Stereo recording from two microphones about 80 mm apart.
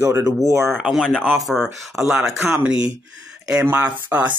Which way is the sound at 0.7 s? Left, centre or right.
Centre.